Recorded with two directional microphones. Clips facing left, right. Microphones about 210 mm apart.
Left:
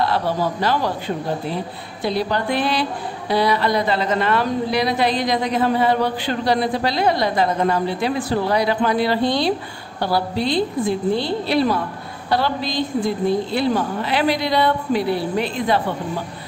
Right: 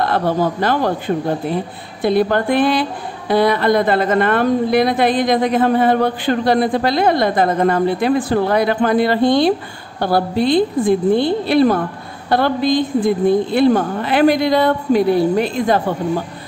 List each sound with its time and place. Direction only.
0.0 s speech: 55° right (ahead or behind)